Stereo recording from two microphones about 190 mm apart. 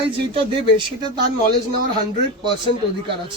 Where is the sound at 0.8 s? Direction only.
25° right (ahead or behind).